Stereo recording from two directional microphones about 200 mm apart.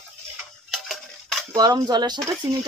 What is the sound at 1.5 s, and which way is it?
Speech, 20° right (ahead or behind).